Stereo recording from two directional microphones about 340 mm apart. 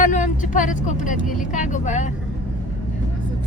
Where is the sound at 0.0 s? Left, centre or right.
Left.